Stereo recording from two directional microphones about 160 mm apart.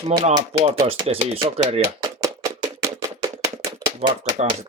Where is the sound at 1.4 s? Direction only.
40° right (ahead or behind).